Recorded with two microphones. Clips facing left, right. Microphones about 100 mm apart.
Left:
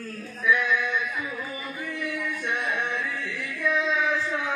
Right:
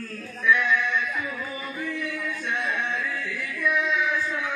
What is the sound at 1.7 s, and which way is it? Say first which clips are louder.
Music: right 1 dB; 15° left (ahead or behind).